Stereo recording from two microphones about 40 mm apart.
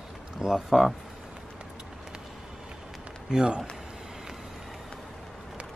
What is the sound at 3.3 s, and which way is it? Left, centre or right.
Speech, right.